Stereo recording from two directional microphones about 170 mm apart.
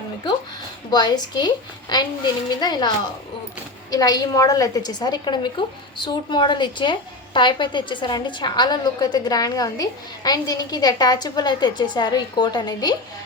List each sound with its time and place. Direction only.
0.9 s a woman's voice: 25° left (ahead or behind)
3.9 s a woman's voice: 20° left (ahead or behind)